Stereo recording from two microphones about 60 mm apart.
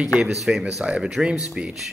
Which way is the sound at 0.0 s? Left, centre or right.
Centre.